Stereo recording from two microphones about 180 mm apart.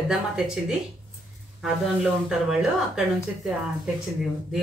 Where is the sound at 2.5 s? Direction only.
5° right (ahead or behind).